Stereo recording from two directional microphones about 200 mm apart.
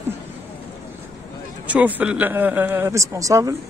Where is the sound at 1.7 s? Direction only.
5° right (ahead or behind).